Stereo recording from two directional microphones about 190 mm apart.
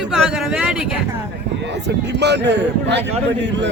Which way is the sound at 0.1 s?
5° right (ahead or behind).